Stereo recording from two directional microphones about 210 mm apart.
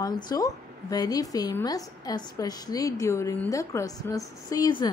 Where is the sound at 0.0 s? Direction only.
20° left (ahead or behind).